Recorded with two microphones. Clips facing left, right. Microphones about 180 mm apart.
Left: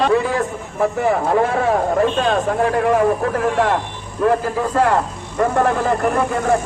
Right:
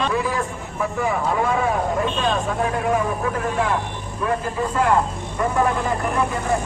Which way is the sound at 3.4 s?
85° left.